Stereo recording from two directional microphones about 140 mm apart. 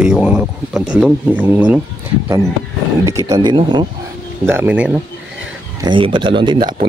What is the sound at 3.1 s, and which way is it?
Speech, 25° right (ahead or behind).